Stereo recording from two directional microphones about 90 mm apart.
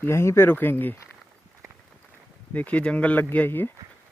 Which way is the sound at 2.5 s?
15° left (ahead or behind).